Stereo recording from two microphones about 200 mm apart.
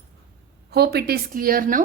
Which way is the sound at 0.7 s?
55° right (ahead or behind).